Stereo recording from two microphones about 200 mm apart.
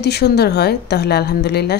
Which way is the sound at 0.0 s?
55° left (ahead or behind).